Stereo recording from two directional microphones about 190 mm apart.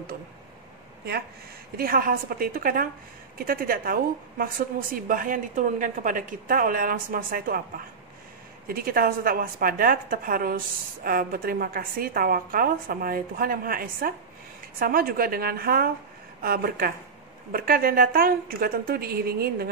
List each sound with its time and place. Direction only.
1.8 s a woman's voice: 50° right (ahead or behind)